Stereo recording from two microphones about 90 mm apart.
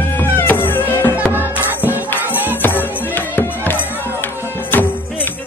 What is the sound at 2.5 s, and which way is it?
Music, 20° left (ahead or behind).